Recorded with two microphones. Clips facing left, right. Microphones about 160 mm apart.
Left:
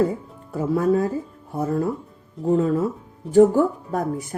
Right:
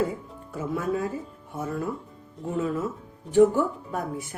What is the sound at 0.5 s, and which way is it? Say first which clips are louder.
Speech: left 8 dB; 40° left (ahead or behind).